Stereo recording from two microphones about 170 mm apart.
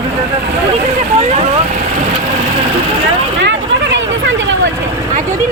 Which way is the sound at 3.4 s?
90° right.